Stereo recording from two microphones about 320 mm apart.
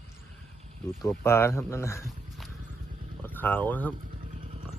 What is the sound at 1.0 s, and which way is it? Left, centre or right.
Speech, centre.